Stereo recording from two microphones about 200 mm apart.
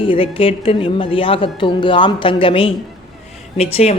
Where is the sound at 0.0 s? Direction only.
25° left (ahead or behind).